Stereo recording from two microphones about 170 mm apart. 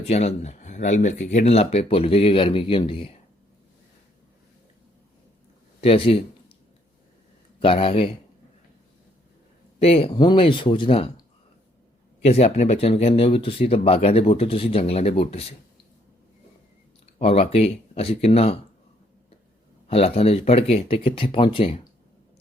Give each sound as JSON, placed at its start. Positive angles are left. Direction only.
{"t": 0.0, "sound": "speech", "side_deg": 40}
{"t": 5.8, "sound": "speech", "side_deg": 35}
{"t": 7.6, "sound": "speech", "side_deg": 35}
{"t": 9.7, "sound": "speech", "side_deg": 35}
{"t": 12.2, "sound": "speech", "side_deg": 40}
{"t": 17.2, "sound": "speech", "side_deg": 35}
{"t": 19.9, "sound": "speech", "side_deg": 35}